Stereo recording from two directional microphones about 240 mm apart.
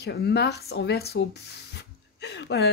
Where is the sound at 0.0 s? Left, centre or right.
Left.